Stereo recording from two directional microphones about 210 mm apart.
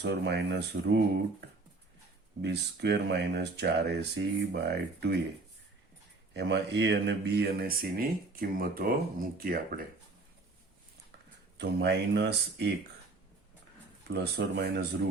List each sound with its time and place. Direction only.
0.0 s speech: 55° right (ahead or behind)
2.4 s speech: 55° right (ahead or behind)
6.3 s speech: 55° right (ahead or behind)
11.5 s speech: 55° right (ahead or behind)
14.1 s speech: 55° right (ahead or behind)